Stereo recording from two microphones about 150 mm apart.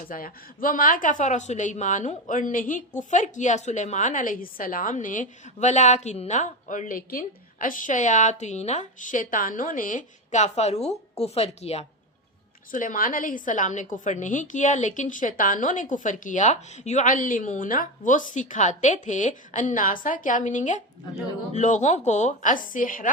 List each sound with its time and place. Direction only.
0.1 s speech: 70° left (ahead or behind); by 11.9 s 45° left (ahead or behind)
12.7 s a woman's voice: 65° left (ahead or behind)